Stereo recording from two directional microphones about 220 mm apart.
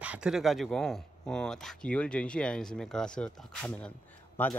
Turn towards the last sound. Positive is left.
turn(degrees=10)  # may be behind; listen again after turning